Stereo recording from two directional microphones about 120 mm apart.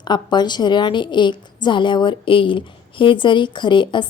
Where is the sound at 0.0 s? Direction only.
40° left (ahead or behind).